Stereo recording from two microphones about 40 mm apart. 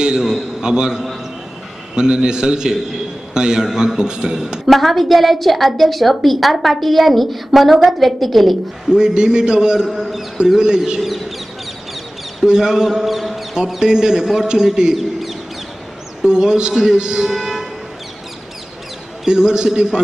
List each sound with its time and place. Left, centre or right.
0.2 s a sound: centre
0.6 s a man's voice: centre
4.6 s a woman's voice: centre
8.8 s a man's voice: centre
11.0 s speech: centre
12.4 s a man's voice: centre
13.7 s a man's voice: centre
16.2 s a man's voice: centre
17.3 s music: centre
19.2 s a man's voice: centre